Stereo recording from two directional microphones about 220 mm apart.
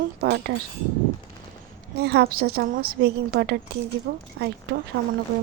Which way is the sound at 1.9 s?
45° right (ahead or behind).